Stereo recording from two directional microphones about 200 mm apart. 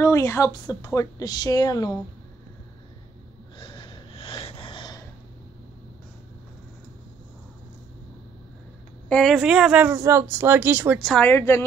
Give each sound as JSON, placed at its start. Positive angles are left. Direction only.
{"t": 0.0, "sound": "speech", "side_deg": 15}
{"t": 3.5, "sound": "gasp", "side_deg": 25}
{"t": 9.1, "sound": "speech", "side_deg": 0}
{"t": 11.0, "sound": "speech", "side_deg": 5}